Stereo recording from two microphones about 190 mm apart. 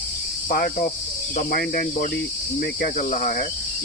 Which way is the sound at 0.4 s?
50° left (ahead or behind).